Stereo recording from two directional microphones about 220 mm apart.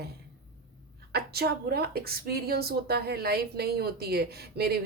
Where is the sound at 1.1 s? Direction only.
45° right (ahead or behind).